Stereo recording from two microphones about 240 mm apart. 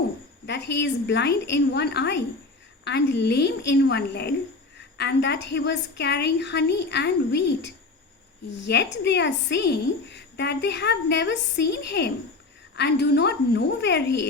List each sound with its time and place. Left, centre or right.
0.4 s a woman's voice: left